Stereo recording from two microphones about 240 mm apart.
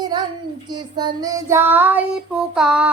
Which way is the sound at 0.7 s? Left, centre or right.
Centre.